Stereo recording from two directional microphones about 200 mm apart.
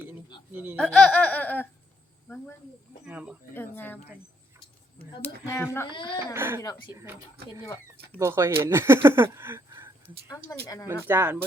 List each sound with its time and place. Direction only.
0.5 s speech: 10° right (ahead or behind)
0.8 s laughter: 5° left (ahead or behind)
3.1 s speech: 5° right (ahead or behind)
3.5 s laughter: 10° left (ahead or behind)
5.9 s speech: 25° left (ahead or behind)
6.1 s speech: 10° right (ahead or behind)
7.6 s laughter: 15° left (ahead or behind)
8.2 s speech: 15° right (ahead or behind)
10.2 s laughter: 15° left (ahead or behind)
10.8 s speech: 10° right (ahead or behind)